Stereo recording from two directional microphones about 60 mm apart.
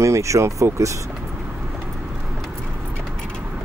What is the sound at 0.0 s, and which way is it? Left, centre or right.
Speech, right.